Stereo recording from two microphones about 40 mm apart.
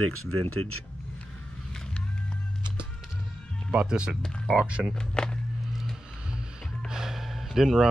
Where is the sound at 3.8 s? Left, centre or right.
Centre.